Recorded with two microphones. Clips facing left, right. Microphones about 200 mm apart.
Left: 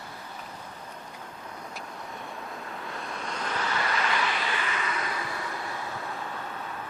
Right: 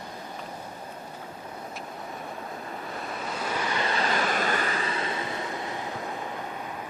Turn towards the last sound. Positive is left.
turn(degrees=-20)  # may be behind; listen again after turning